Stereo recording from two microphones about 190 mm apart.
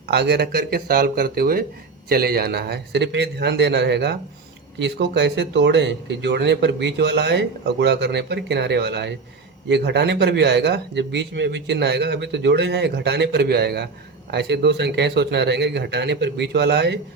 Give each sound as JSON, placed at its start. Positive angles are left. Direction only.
{"t": 0.1, "sound": "speech", "side_deg": -60}